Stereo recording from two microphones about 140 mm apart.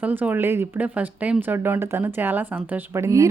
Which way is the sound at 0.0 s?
10° right (ahead or behind).